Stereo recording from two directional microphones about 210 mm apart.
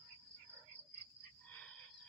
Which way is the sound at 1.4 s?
5° left (ahead or behind).